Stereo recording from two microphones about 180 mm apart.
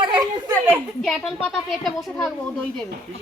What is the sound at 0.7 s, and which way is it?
A child's voice, centre (ahead or behind).